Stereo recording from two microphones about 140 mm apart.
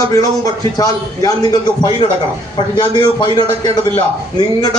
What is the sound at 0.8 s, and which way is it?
A man's voice, 25° left (ahead or behind).